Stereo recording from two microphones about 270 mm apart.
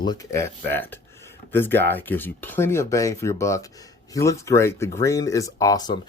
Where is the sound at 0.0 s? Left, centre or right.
Centre.